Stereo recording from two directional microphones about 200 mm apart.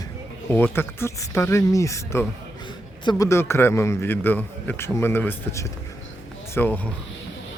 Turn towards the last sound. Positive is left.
turn(degrees=10)  # may be behind; listen again after turning